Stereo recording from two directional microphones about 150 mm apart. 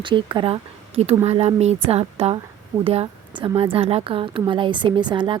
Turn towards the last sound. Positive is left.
turn(degrees=-30)  # may be behind; listen again after turning